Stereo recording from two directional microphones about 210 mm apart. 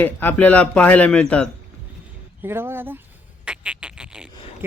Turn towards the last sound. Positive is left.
turn(degrees=-5)  # may be behind; listen again after turning